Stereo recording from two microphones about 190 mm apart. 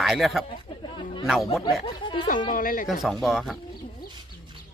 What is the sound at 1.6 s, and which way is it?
Speech, 25° left (ahead or behind).